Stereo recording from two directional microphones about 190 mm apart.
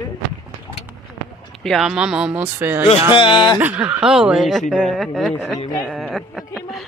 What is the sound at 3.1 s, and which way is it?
Speech, 25° left (ahead or behind).